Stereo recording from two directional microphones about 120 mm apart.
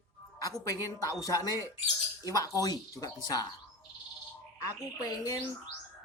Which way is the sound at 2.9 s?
30° left (ahead or behind).